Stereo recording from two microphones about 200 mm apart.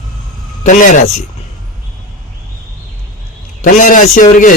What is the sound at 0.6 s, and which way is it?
Speech, 40° left (ahead or behind).